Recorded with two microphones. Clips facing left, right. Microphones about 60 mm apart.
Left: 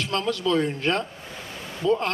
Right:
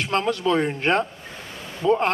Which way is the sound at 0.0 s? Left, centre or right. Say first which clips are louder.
Right 3 dB; right.